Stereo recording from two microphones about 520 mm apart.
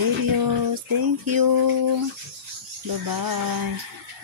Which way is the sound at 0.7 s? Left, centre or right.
Right.